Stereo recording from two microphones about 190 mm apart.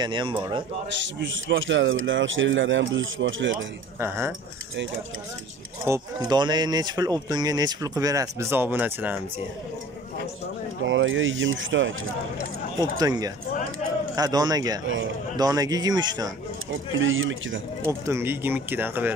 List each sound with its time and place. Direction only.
0.0 s speech: 25° right (ahead or behind)
0.8 s speech: 75° right (ahead or behind)
4.0 s speech: 15° right (ahead or behind)
5.9 s speech: 20° right (ahead or behind)
10.9 s speech: 90° right
13.0 s speech: 20° right (ahead or behind)
16.7 s speech: 90° right
18.0 s speech: 10° right (ahead or behind)